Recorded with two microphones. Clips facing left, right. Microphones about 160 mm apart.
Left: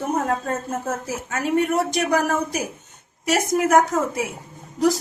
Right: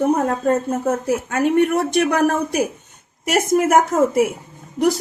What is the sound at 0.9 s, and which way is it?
A woman's voice, 60° right (ahead or behind).